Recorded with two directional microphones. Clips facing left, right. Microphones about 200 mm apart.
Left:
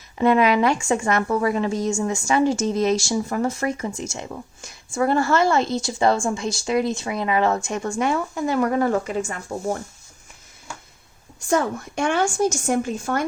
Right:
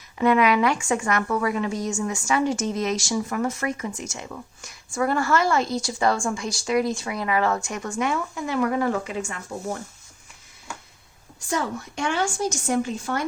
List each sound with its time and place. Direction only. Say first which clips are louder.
0.2 s a woman's voice: left 2 dB; 30° left (ahead or behind)
11.4 s a woman's voice: left 5 dB; 50° left (ahead or behind)